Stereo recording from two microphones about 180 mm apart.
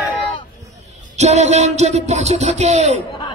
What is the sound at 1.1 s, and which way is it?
Speech, 40° right (ahead or behind).